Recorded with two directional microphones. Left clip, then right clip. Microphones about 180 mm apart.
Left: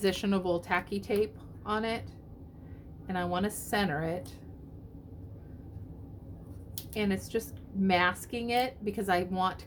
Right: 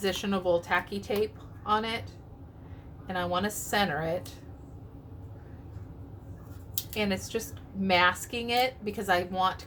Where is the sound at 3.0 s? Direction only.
40° left (ahead or behind).